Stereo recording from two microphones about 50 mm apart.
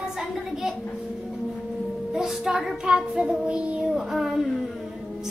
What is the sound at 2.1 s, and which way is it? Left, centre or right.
Music, centre.